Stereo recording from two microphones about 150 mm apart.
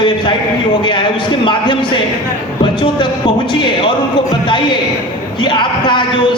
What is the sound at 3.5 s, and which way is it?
Speech, 30° left (ahead or behind).